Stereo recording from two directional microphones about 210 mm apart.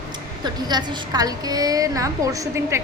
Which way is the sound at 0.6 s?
20° right (ahead or behind).